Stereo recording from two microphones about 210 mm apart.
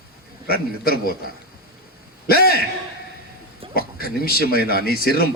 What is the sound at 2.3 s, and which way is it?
Speech, 45° left (ahead or behind).